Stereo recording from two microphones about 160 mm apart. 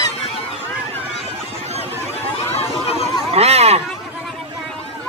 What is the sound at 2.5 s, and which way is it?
Chatter, 40° left (ahead or behind).